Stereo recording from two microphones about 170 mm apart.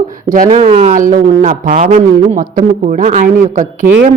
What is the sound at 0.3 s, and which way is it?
Speech, 50° right (ahead or behind).